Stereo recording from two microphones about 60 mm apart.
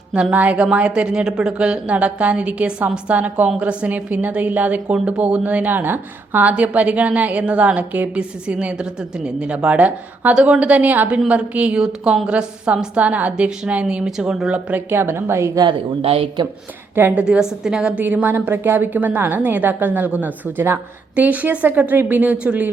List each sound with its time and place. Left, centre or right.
0.1 s a woman's voice: centre
6.4 s a woman's voice: right
11.8 s a woman's voice: centre
14.8 s a woman's voice: right
17.2 s a woman's voice: right
17.6 s a woman's voice: centre
17.9 s a woman's voice: right